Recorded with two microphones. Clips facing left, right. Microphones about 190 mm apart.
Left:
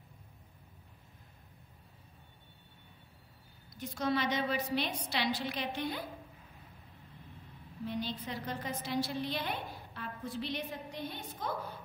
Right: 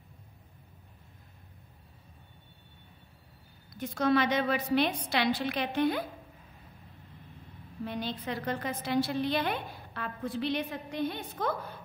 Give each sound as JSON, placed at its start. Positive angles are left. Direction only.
{"t": 3.8, "sound": "a woman's voice", "side_deg": -60}
{"t": 7.8, "sound": "a woman's voice", "side_deg": -65}